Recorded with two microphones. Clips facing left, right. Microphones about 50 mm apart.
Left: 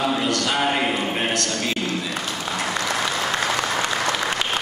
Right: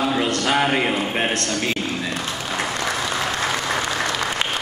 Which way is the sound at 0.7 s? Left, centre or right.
Centre.